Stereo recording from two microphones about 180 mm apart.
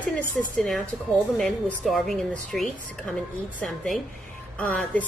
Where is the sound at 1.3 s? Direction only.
Centre (ahead or behind).